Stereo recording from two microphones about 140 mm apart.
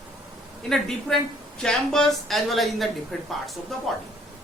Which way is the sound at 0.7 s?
5° left (ahead or behind).